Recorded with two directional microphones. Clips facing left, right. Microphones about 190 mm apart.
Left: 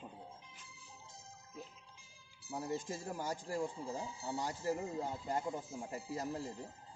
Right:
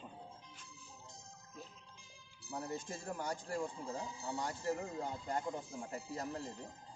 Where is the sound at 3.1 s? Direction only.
5° left (ahead or behind).